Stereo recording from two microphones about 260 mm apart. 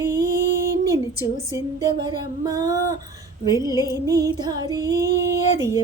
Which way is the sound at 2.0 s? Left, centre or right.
Centre.